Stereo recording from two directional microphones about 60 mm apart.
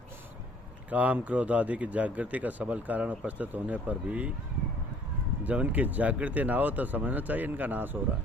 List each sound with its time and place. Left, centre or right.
0.9 s speech: right
5.4 s speech: right